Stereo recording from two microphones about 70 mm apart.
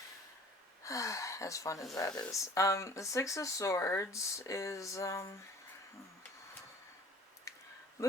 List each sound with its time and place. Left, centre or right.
0.9 s speech: left
2.0 s speech: centre
2.3 s speech: left
7.5 s a sound: left